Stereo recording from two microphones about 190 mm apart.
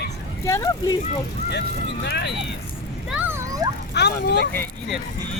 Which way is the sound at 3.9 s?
60° left (ahead or behind).